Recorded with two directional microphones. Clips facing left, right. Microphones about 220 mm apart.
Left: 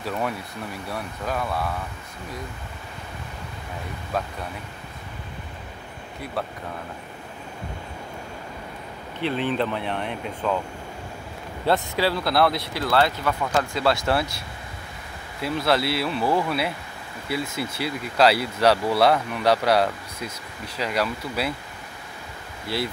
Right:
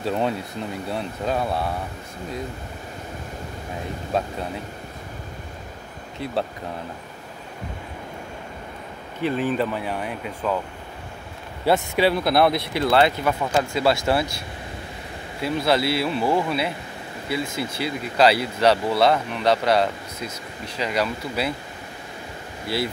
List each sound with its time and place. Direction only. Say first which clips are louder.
0.0 s speech: right 4 dB; 25° right (ahead or behind)
4.1 s speech: right 3 dB; 25° right (ahead or behind)
9.2 s speech: right 2 dB; centre (ahead or behind)
11.6 s speech: right 3 dB; 10° right (ahead or behind)
15.4 s speech: right 2 dB; centre (ahead or behind)